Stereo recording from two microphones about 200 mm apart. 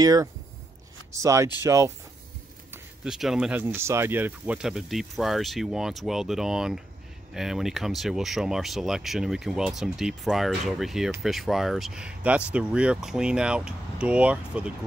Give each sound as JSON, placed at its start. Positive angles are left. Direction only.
{"t": 0.0, "sound": "speech", "side_deg": -20}
{"t": 2.7, "sound": "speech", "side_deg": -5}